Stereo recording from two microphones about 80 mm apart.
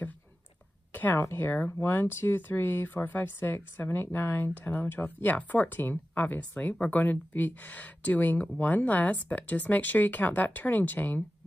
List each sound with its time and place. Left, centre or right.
0.9 s speech: left